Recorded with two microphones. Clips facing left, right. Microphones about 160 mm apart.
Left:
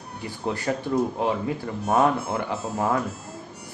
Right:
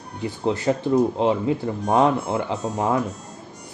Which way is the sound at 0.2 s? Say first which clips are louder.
Right 5 dB; 20° right (ahead or behind).